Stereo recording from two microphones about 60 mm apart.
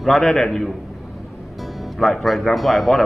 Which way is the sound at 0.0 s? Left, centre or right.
Centre.